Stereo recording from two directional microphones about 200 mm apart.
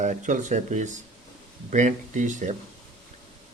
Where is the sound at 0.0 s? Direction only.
40° right (ahead or behind).